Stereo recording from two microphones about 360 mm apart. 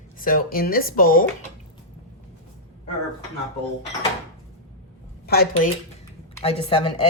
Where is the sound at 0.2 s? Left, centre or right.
Left.